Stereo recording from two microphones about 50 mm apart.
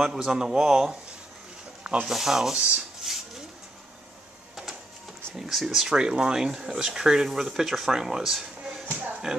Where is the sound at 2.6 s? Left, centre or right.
Centre.